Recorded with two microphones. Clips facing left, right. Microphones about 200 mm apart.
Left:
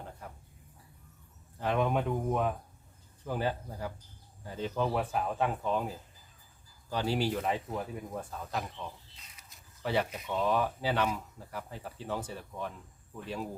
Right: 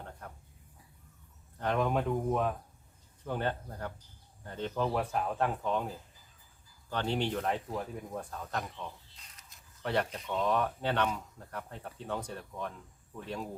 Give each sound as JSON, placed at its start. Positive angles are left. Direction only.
{"t": 0.0, "sound": "a sound", "side_deg": 5}
{"t": 1.5, "sound": "speech", "side_deg": 0}
{"t": 6.9, "sound": "speech", "side_deg": 5}